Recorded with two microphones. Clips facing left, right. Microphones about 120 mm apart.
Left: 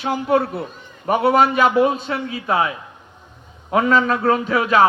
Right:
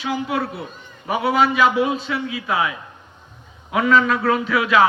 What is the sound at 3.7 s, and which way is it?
A man's voice, 40° left (ahead or behind).